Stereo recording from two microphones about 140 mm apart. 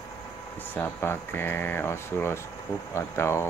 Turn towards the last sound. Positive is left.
turn(degrees=20)  # may be behind; listen again after turning